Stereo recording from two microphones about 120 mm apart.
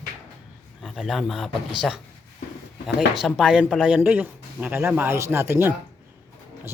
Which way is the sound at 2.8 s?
5° right (ahead or behind).